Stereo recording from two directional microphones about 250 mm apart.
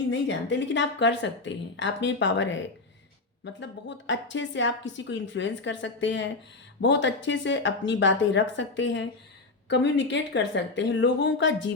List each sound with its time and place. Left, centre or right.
0.1 s a woman's voice: left